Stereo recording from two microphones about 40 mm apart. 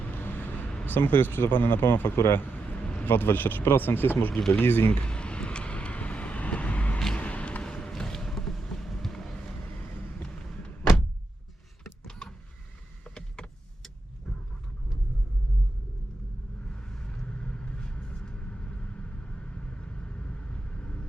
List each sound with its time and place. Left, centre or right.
0.1 s a sound: left
0.9 s speech: left
2.5 s a sound: left
3.0 s speech: left
5.0 s vehicle: left
7.6 s vehicle: left
11.8 s power windows: centre
14.3 s vehicle: centre
16.9 s vehicle: centre